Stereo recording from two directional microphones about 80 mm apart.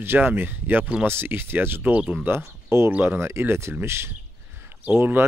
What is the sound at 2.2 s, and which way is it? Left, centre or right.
Speech, right.